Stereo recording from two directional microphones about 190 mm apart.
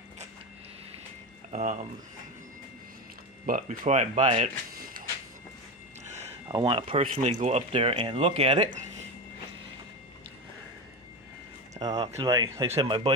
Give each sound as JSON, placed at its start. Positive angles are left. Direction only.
{"t": 1.5, "sound": "speech", "side_deg": -40}
{"t": 3.4, "sound": "speech", "side_deg": -45}
{"t": 6.5, "sound": "speech", "side_deg": -25}
{"t": 11.8, "sound": "speech", "side_deg": -20}